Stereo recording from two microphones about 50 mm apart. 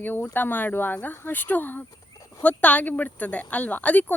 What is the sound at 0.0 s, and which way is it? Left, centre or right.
A woman's voice, left.